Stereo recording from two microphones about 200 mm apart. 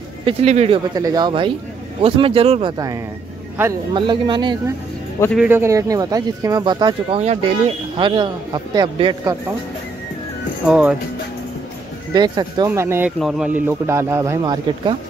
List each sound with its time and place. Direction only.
0.2 s speech: 30° right (ahead or behind)
0.9 s speech: 20° right (ahead or behind)
3.9 s speech: 25° right (ahead or behind)
5.3 s speech: 10° right (ahead or behind)
10.7 s speech: 5° right (ahead or behind)
12.1 s a man's voice: 20° right (ahead or behind)